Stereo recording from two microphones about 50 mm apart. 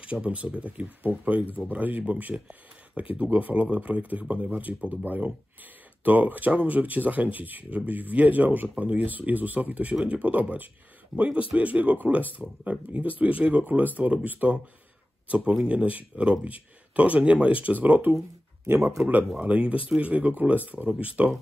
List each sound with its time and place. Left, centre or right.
0.0 s speech: right
2.3 s speech: centre
19.4 s speech: right